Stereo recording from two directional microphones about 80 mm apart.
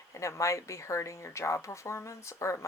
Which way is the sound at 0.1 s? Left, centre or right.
Left.